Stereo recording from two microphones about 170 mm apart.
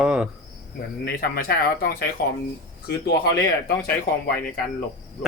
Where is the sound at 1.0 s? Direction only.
65° left (ahead or behind).